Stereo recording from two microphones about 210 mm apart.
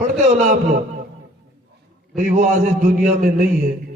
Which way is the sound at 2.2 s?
35° right (ahead or behind).